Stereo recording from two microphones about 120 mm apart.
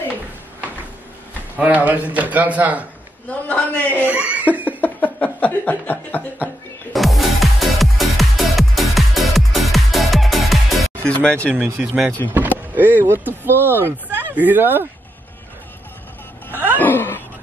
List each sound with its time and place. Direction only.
1.6 s speech: 10° right (ahead or behind)
3.4 s a man's voice: 10° left (ahead or behind)
4.1 s laughter: 10° right (ahead or behind)
4.8 s chuckle: 15° left (ahead or behind)
6.9 s music: centre (ahead or behind)
11.0 s speech: 10° left (ahead or behind)
11.8 s speech: 5° right (ahead or behind)
16.5 s a sound: 15° right (ahead or behind)
16.8 s a sound: 15° left (ahead or behind)